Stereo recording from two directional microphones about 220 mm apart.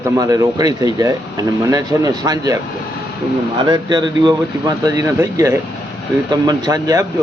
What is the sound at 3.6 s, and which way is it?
Speech, 20° right (ahead or behind).